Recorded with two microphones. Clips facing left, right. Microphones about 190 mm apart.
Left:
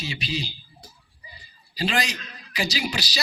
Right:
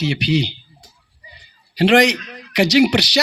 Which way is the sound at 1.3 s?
70° right (ahead or behind).